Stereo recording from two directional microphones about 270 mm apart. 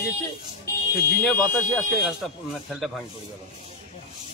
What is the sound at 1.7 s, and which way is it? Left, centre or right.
A man's voice, centre.